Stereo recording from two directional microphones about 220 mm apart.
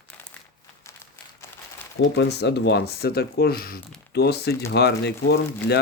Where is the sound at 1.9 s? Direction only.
50° left (ahead or behind).